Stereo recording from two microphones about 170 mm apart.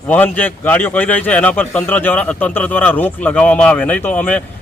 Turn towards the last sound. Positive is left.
turn(degrees=10)  # may be behind; listen again after turning